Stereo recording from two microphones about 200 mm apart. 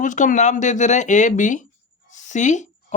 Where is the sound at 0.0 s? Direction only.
40° left (ahead or behind).